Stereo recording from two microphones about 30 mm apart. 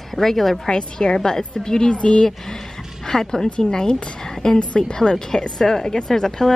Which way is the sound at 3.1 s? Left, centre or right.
Centre.